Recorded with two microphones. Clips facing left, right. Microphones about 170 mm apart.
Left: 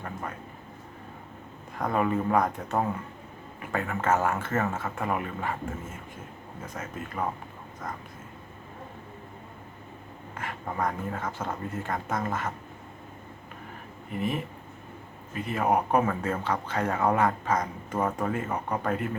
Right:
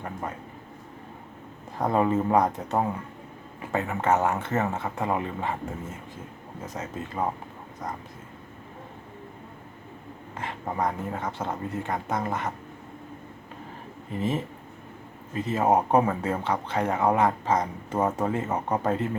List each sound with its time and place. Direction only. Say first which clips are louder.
0.0 s speech: right 2 dB; 20° right (ahead or behind)
1.8 s speech: right 3 dB; 25° right (ahead or behind)
6.7 s speech: right 3 dB; 20° right (ahead or behind)
10.3 s speech: right 2 dB; 20° right (ahead or behind)
14.1 s speech: right 2 dB; 25° right (ahead or behind)